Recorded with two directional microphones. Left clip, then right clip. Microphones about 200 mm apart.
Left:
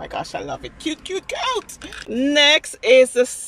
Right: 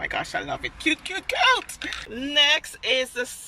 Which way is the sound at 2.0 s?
45° left (ahead or behind).